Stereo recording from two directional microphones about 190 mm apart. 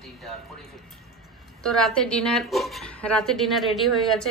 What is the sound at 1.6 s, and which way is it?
A woman's voice, 5° left (ahead or behind).